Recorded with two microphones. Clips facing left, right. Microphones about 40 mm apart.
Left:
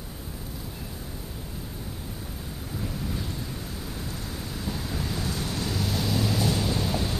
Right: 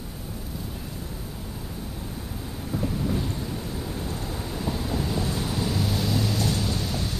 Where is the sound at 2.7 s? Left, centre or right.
Centre.